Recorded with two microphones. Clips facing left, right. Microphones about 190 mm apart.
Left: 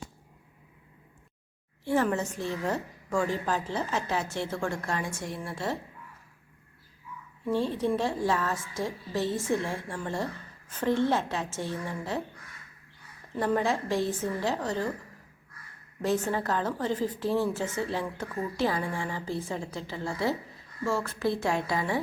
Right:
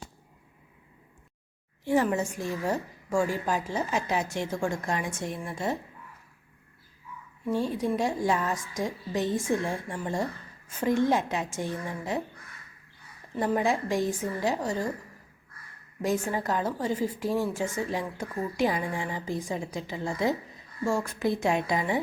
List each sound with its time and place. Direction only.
1.8 s a woman's voice: 15° right (ahead or behind)
7.4 s a woman's voice: 10° right (ahead or behind)
13.3 s a woman's voice: 10° right (ahead or behind)
16.0 s a woman's voice: 10° right (ahead or behind)